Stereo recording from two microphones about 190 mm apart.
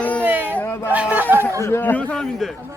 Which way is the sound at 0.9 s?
10° right (ahead or behind).